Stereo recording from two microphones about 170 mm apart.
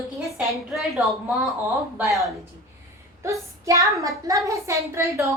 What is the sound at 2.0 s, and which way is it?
A woman's voice, 20° right (ahead or behind).